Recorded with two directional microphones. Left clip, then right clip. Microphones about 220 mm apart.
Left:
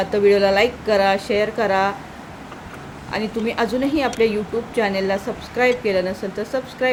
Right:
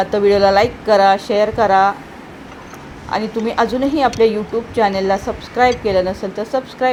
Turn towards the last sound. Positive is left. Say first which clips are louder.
# right 4 dB
turn(degrees=-5)  # may be behind; listen again after turning